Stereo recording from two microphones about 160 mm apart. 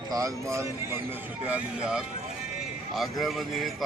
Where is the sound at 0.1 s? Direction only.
20° right (ahead or behind).